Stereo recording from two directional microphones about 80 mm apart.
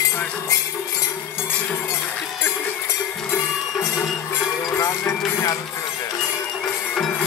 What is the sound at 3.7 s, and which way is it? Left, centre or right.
Music, centre.